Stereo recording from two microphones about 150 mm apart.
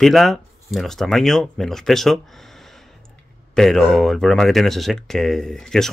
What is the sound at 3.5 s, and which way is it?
Speech, centre (ahead or behind).